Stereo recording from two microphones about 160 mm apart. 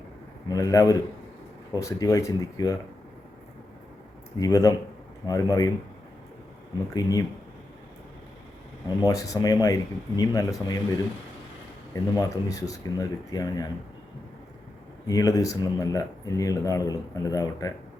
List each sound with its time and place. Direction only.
0.4 s speech: 20° left (ahead or behind)
4.4 s speech: 20° left (ahead or behind)
6.9 s speech: 25° left (ahead or behind)
9.0 s speech: 20° left (ahead or behind)
11.9 s speech: 20° left (ahead or behind)
15.0 s speech: 20° left (ahead or behind)